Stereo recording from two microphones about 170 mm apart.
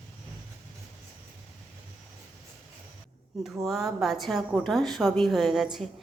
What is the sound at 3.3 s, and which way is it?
A woman's voice, centre (ahead or behind).